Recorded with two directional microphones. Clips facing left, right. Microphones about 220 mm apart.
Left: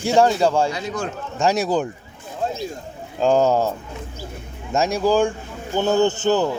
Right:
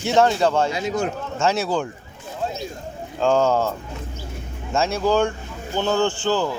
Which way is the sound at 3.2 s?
15° left (ahead or behind).